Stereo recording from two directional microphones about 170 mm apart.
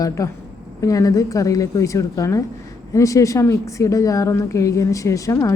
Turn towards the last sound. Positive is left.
turn(degrees=20)  # may be behind; listen again after turning